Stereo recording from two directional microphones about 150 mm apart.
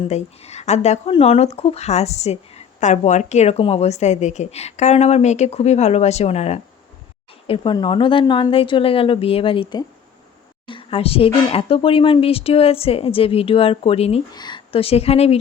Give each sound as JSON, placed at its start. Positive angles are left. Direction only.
{"t": 0.1, "sound": "a woman's voice", "side_deg": 45}
{"t": 14.3, "sound": "speech", "side_deg": 30}